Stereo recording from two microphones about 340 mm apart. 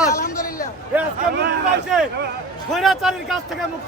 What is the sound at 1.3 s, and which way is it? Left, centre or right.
Speech, right.